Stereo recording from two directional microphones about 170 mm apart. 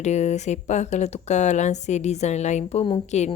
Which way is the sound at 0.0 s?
40° left (ahead or behind).